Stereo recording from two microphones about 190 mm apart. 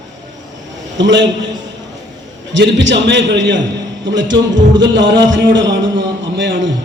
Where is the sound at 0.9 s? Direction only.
70° right (ahead or behind).